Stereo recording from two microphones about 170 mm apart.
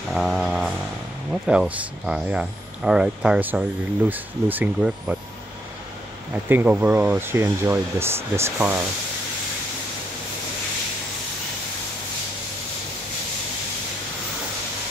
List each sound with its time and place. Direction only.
0.1 s speech: centre (ahead or behind)
6.5 s speech: 10° right (ahead or behind)